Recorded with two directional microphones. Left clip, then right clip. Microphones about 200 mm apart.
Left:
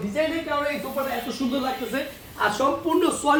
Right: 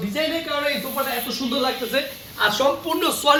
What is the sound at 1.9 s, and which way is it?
A man's voice, 5° right (ahead or behind).